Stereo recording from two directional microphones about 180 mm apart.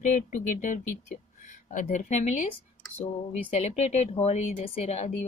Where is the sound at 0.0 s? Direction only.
45° left (ahead or behind).